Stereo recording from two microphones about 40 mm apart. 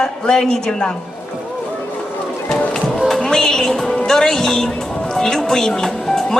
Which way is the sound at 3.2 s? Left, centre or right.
Centre.